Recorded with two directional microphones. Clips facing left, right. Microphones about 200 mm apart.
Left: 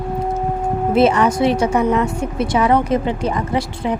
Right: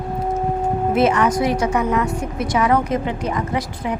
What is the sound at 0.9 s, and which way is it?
A woman's voice, 30° left (ahead or behind).